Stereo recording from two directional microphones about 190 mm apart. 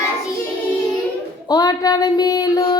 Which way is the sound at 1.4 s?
20° left (ahead or behind).